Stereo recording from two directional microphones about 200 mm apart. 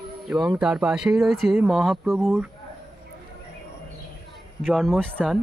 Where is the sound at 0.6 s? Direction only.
5° right (ahead or behind).